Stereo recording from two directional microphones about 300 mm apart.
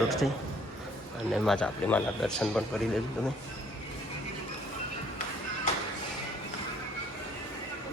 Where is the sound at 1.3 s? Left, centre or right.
Centre.